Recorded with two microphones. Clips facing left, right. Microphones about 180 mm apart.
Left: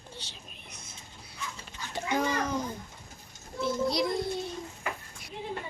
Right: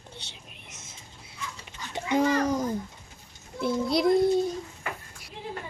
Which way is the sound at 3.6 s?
55° right (ahead or behind).